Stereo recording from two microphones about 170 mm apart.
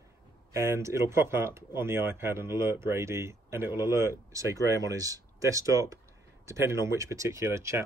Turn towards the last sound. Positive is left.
turn(degrees=-15)  # may be behind; listen again after turning